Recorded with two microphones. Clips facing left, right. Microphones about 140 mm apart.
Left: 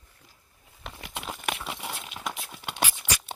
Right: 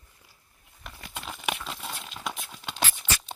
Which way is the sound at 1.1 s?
10° left (ahead or behind).